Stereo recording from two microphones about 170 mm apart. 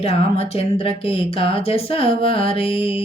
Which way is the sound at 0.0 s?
35° left (ahead or behind).